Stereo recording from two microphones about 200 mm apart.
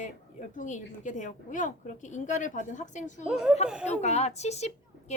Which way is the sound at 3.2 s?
5° right (ahead or behind).